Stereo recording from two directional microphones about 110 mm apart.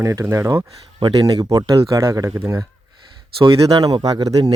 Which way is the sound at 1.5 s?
30° right (ahead or behind).